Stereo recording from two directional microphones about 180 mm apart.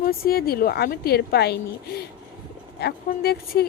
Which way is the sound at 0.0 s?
55° left (ahead or behind).